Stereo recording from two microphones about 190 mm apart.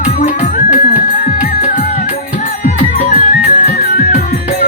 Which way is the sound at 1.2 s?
40° left (ahead or behind).